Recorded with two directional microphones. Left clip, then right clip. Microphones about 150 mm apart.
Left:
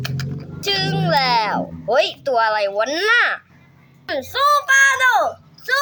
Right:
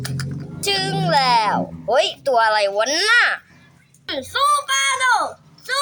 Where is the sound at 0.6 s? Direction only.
Centre (ahead or behind).